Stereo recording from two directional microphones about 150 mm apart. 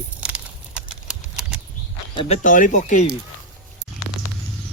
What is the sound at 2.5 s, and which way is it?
Speech, 60° left (ahead or behind).